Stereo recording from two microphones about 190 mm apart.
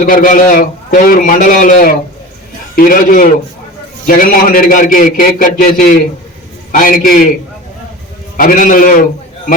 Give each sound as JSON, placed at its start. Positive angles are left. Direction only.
{"t": 0.0, "sound": "a man's voice", "side_deg": 45}
{"t": 8.4, "sound": "a man's voice", "side_deg": 45}